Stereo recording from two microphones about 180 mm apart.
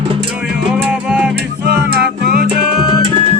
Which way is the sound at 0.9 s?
5° right (ahead or behind).